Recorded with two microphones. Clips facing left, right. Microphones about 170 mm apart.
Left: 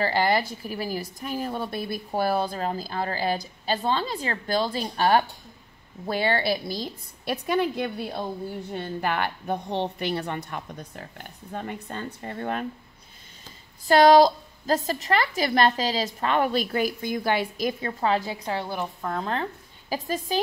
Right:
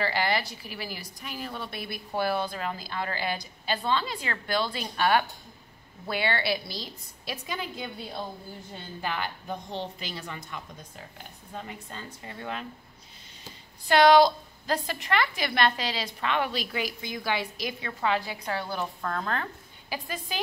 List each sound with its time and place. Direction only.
0.0 s a woman's voice: 40° left (ahead or behind)
13.8 s a woman's voice: 40° left (ahead or behind); by 19.4 s 20° left (ahead or behind)
19.9 s a woman's voice: 40° left (ahead or behind)